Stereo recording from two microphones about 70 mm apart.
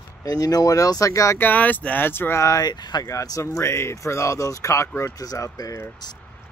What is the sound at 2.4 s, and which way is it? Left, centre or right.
Speech, left.